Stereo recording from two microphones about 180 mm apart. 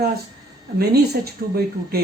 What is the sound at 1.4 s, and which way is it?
Speech, 70° right (ahead or behind).